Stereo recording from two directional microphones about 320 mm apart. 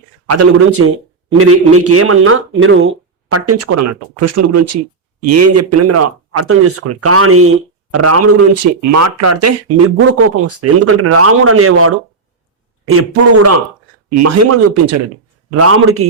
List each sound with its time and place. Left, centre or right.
0.3 s speech: right